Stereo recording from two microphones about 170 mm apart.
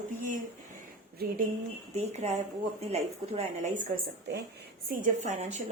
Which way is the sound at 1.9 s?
40° right (ahead or behind).